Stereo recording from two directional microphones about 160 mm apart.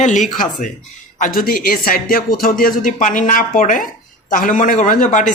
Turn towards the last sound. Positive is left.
turn(degrees=55)  # may be behind; listen again after turning